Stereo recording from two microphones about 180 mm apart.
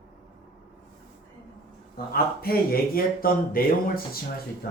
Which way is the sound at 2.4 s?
55° left (ahead or behind).